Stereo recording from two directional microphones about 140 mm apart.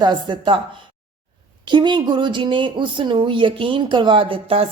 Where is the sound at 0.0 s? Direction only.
30° right (ahead or behind).